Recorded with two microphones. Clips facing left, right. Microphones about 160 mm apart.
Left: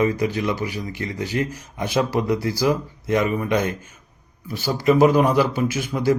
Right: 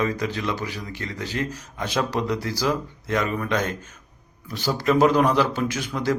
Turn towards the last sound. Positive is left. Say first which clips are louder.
# left 4 dB
turn(degrees=10)  # may be behind; listen again after turning